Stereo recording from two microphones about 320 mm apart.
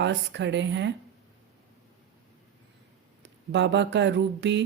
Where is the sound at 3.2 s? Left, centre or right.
Right.